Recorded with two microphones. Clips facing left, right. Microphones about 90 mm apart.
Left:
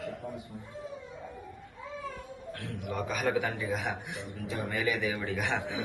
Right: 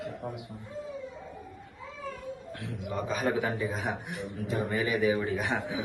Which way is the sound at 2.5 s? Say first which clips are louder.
Even; 20° right (ahead or behind).